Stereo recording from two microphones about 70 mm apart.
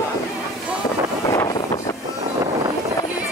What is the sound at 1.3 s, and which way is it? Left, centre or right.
Vehicle, left.